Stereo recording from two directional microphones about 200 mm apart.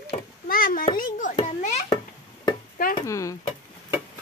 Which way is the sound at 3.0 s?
15° left (ahead or behind).